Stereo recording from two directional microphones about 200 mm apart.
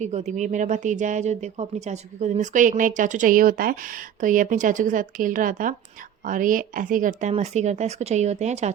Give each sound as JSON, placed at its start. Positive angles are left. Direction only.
{"t": 0.0, "sound": "speech", "side_deg": -35}